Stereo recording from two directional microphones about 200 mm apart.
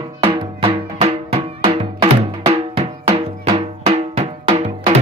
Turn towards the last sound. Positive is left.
turn(degrees=-30)  # may be behind; listen again after turning